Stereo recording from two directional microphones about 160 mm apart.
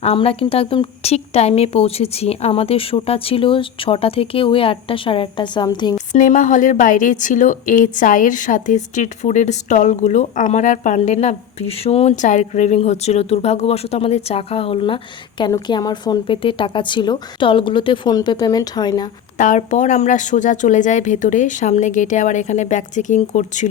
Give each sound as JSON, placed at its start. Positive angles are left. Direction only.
{"t": 0.0, "sound": "a woman's voice", "side_deg": 35}
{"t": 6.1, "sound": "a woman's voice", "side_deg": 55}
{"t": 19.4, "sound": "a woman's voice", "side_deg": 50}